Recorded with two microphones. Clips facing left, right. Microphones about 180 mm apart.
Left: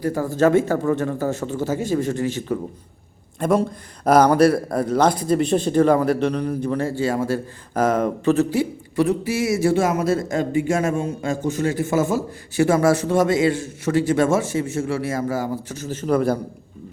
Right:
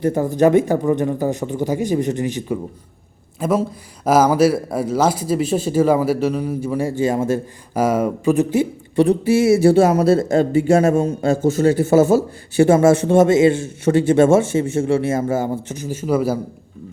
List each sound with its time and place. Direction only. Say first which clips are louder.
0.0 s speech: right 3 dB; 20° right (ahead or behind)
3.4 s speech: even; 5° right (ahead or behind); by 7.4 s 20° right (ahead or behind)
7.7 s speech: right 2 dB; 10° right (ahead or behind)